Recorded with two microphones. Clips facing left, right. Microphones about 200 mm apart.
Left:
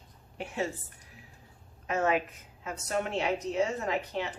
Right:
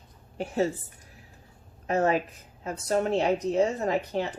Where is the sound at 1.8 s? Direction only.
35° right (ahead or behind).